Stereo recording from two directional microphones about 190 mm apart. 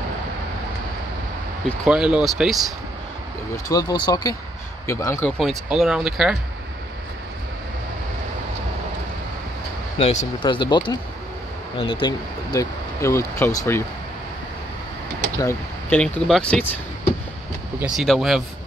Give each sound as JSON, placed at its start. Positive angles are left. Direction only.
{"t": 1.9, "sound": "speech", "side_deg": -5}
{"t": 3.6, "sound": "speech", "side_deg": 20}
{"t": 5.4, "sound": "speech", "side_deg": 0}
{"t": 9.9, "sound": "speech", "side_deg": 30}
{"t": 15.4, "sound": "speech", "side_deg": 5}
{"t": 17.7, "sound": "speech", "side_deg": -5}